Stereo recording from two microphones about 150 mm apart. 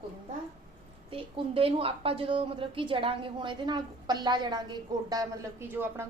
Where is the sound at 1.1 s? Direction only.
40° right (ahead or behind).